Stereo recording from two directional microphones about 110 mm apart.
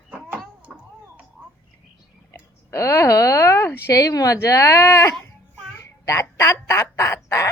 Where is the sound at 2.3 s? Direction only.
25° left (ahead or behind).